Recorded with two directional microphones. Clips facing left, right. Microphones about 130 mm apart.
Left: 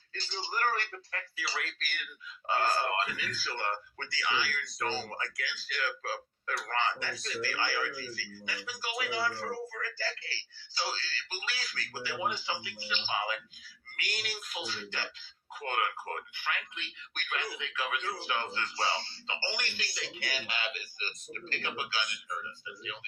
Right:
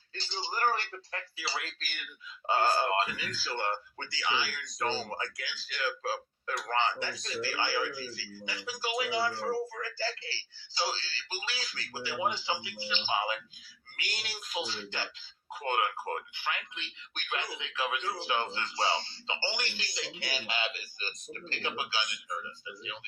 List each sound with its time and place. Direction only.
0.1 s speech: 30° right (ahead or behind)